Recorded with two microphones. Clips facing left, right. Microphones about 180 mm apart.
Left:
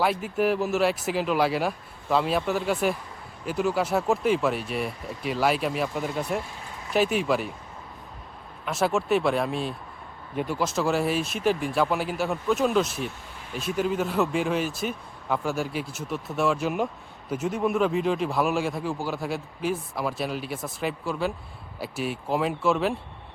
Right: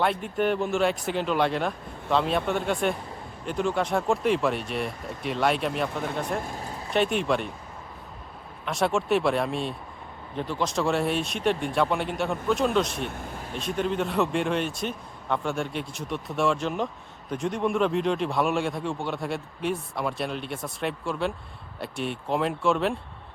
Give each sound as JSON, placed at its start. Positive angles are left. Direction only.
{"t": 0.0, "sound": "speech", "side_deg": 5}
{"t": 8.6, "sound": "speech", "side_deg": 0}